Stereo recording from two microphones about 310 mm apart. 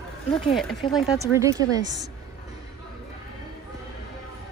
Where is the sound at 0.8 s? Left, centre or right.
Centre.